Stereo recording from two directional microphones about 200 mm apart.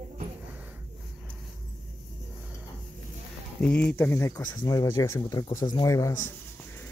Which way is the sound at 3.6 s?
5° left (ahead or behind).